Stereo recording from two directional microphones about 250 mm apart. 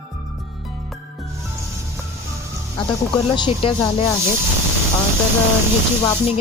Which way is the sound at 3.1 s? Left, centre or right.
Left.